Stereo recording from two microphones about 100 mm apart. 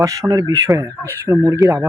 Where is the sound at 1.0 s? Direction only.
25° right (ahead or behind).